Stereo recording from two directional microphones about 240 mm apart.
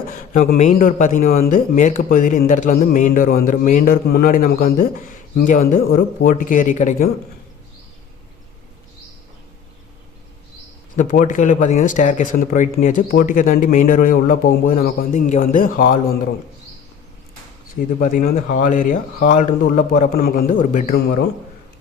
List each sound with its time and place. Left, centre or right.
0.1 s speech: left
10.9 s speech: left
17.7 s speech: left